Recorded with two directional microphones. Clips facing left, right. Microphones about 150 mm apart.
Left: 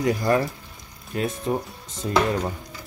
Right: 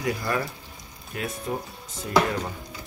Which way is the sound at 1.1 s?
30° left (ahead or behind).